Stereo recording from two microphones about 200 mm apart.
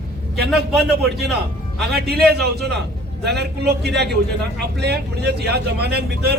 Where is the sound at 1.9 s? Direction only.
50° right (ahead or behind).